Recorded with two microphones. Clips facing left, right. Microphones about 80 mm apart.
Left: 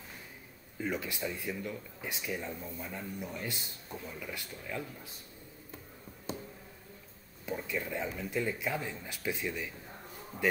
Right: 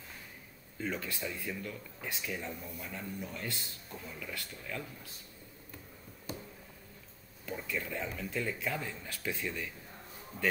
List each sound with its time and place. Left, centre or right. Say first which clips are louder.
0.7 s speech: left 2 dB; centre
7.4 s speech: left 2 dB; centre